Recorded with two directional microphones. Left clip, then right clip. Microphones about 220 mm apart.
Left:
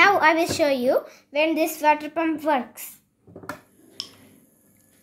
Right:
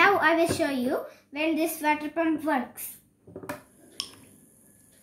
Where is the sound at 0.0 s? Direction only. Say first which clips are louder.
Left 4 dB; 40° left (ahead or behind).